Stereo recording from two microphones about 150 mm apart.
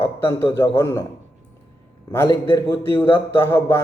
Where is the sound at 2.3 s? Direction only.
15° left (ahead or behind).